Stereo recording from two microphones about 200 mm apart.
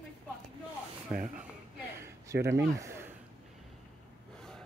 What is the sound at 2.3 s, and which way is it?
Speech, 15° right (ahead or behind).